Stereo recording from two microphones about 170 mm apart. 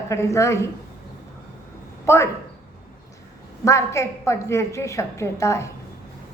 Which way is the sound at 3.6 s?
15° left (ahead or behind).